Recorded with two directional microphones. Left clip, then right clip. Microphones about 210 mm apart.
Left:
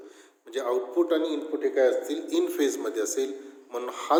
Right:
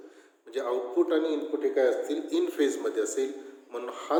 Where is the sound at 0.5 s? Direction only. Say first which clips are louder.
Left 2 dB; 25° left (ahead or behind).